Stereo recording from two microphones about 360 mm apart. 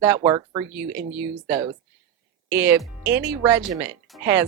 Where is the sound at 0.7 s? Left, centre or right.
Right.